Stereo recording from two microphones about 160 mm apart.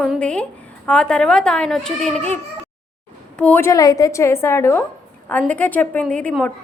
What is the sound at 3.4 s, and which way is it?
A woman's voice, 10° left (ahead or behind).